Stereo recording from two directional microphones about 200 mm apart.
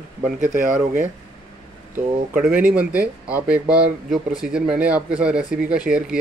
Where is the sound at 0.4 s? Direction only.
40° right (ahead or behind).